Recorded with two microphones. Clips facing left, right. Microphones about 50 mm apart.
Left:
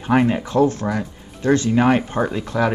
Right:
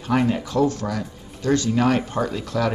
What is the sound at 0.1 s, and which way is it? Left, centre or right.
Speech, left.